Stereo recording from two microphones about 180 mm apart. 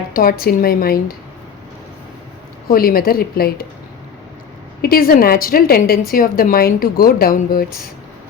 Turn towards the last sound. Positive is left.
turn(degrees=55)  # may be behind; listen again after turning